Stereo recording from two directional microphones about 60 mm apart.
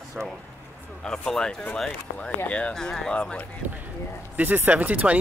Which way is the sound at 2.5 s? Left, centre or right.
Centre.